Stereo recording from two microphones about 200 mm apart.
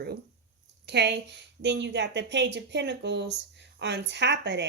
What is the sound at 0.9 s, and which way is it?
Speech, 55° right (ahead or behind).